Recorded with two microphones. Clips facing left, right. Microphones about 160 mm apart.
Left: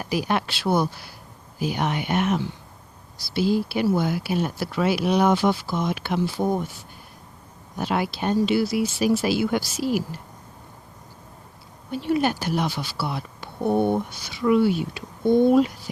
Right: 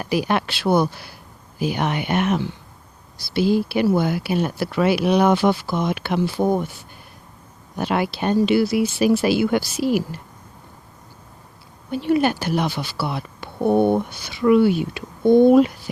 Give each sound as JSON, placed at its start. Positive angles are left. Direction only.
{"t": 0.0, "sound": "speech", "side_deg": -70}
{"t": 11.9, "sound": "speech", "side_deg": -65}